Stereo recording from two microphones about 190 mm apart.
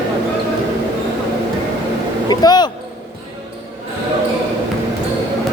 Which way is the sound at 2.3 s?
20° left (ahead or behind).